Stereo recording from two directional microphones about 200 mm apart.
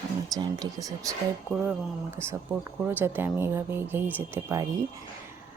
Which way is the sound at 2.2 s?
15° right (ahead or behind).